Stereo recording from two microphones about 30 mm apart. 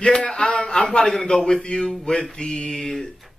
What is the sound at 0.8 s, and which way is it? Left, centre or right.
Speech, left.